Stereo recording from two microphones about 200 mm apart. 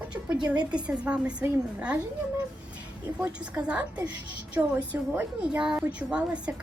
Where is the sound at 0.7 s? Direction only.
5° right (ahead or behind).